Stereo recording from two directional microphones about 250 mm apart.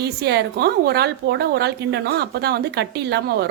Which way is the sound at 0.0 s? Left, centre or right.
Right.